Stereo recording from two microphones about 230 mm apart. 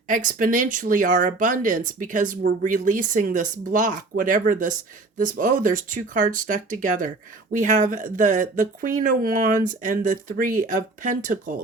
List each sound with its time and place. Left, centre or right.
0.3 s speech: right